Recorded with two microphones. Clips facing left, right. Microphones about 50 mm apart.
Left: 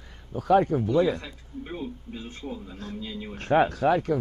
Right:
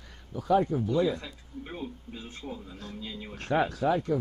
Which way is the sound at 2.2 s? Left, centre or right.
Left.